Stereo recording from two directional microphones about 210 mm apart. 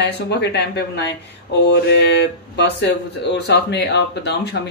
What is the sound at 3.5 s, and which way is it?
Speech, 55° left (ahead or behind).